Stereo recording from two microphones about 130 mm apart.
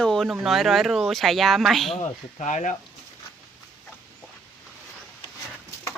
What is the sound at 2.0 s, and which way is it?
Speech, 60° left (ahead or behind).